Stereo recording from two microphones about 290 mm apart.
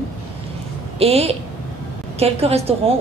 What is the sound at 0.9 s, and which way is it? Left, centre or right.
A woman's voice, right.